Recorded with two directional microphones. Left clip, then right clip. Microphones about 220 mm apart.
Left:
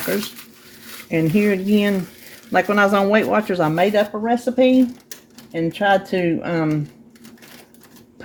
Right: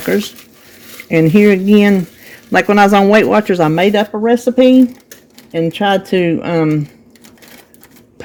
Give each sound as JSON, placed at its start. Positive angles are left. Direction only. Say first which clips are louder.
{"t": 1.1, "sound": "speech", "louder": "right 9 dB", "side_deg": -50}